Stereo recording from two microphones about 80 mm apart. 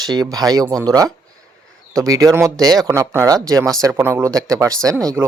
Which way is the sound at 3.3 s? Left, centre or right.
Right.